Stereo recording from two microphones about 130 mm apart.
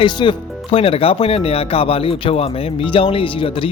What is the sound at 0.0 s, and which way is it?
Speech, 40° left (ahead or behind).